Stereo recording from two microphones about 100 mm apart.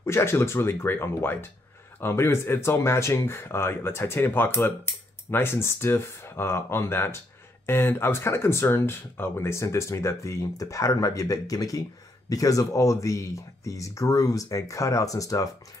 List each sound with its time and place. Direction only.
0.0 s speech: 25° left (ahead or behind)